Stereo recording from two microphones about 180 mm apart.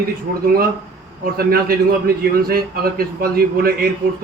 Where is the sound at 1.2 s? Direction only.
55° right (ahead or behind).